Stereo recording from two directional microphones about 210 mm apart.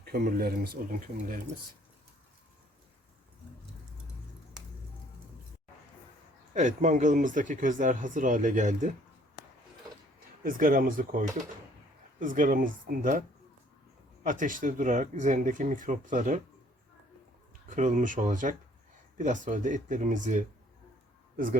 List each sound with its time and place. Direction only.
0.0 s speech: 50° right (ahead or behind)
6.5 s speech: 35° right (ahead or behind)
10.4 s speech: 40° right (ahead or behind)
14.3 s speech: 40° right (ahead or behind)
17.7 s speech: 35° right (ahead or behind)